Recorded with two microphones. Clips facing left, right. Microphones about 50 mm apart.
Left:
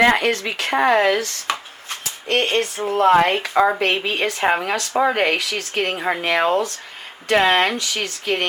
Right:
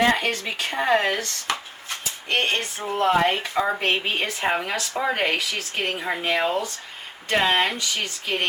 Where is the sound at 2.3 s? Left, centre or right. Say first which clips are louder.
Left 4 dB; left.